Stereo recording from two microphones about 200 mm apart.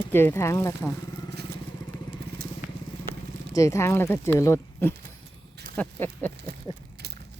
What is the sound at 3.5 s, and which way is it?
Speech, 15° left (ahead or behind).